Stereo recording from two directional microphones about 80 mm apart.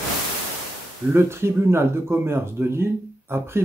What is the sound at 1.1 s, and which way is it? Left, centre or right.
Speech, right.